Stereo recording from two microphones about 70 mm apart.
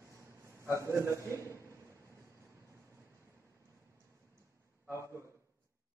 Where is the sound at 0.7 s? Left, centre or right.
Right.